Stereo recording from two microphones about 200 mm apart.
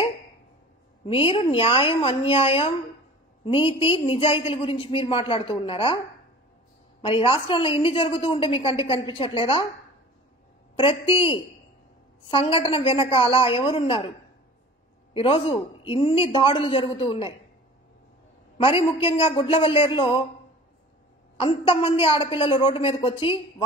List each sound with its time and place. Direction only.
1.0 s a woman's voice: 25° left (ahead or behind)
10.8 s a woman's voice: 25° left (ahead or behind)
15.1 s a woman's voice: 25° left (ahead or behind)
18.6 s a woman's voice: 25° left (ahead or behind)
21.4 s a woman's voice: 25° left (ahead or behind)